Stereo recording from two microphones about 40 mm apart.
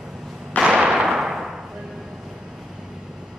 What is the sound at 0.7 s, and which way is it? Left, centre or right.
Whip, right.